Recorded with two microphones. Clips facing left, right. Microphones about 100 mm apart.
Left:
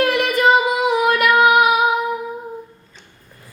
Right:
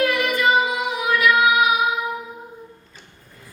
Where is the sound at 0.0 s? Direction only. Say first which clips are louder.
Left 3 dB; 75° left (ahead or behind).